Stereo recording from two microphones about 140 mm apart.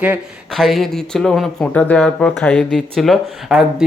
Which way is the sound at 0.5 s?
Centre (ahead or behind).